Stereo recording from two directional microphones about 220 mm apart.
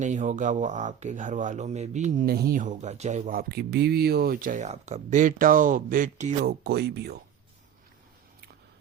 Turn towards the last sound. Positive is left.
turn(degrees=-50)  # may be behind; listen again after turning